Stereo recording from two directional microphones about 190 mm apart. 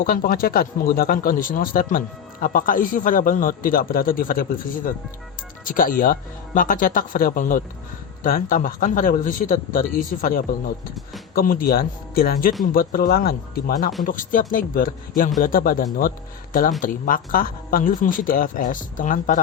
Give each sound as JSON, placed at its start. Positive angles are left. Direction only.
{"t": 0.0, "sound": "speech", "side_deg": 50}